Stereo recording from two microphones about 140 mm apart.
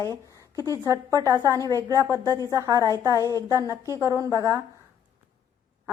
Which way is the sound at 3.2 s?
25° left (ahead or behind).